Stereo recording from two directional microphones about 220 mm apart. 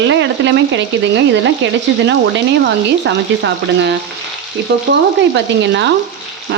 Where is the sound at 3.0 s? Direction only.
55° right (ahead or behind).